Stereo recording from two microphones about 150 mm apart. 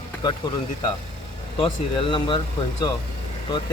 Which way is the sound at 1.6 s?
30° left (ahead or behind).